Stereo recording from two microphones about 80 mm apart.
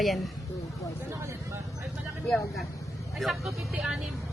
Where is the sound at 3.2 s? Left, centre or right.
Centre.